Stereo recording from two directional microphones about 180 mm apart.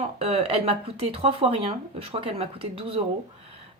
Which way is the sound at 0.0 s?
35° right (ahead or behind).